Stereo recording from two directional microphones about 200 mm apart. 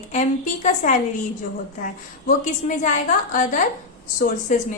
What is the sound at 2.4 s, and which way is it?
A woman's voice, 40° left (ahead or behind).